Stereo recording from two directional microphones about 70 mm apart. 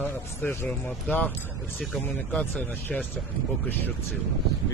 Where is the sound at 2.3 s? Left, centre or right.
Left.